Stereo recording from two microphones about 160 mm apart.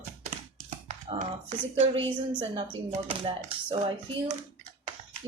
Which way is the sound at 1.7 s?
35° right (ahead or behind).